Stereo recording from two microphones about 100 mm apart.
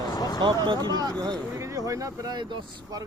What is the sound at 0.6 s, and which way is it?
Speech, 45° right (ahead or behind).